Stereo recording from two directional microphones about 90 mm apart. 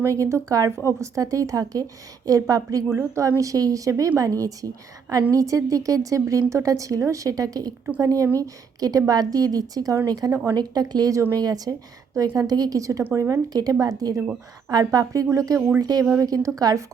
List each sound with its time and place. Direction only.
0.0 s a woman's voice: 35° right (ahead or behind)
13.5 s a woman's voice: 45° right (ahead or behind)
15.8 s a woman's voice: 45° right (ahead or behind)